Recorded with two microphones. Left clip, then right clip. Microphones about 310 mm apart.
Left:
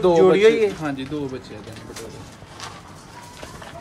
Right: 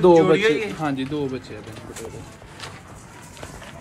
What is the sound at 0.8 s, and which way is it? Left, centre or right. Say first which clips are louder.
Speech: right 2 dB; centre.